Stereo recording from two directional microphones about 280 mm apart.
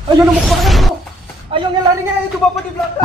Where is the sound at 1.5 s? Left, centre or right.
Centre.